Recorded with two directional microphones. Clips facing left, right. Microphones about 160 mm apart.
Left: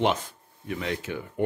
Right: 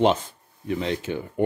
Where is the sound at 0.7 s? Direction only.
30° right (ahead or behind).